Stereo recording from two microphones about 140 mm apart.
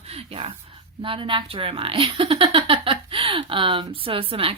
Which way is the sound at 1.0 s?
40° right (ahead or behind).